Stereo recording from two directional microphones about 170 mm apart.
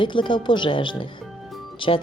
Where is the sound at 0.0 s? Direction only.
30° left (ahead or behind).